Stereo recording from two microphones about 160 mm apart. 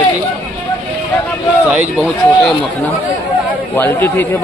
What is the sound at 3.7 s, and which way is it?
Speech, 15° left (ahead or behind).